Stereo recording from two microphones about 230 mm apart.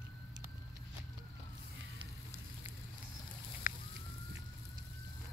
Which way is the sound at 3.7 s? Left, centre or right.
Left.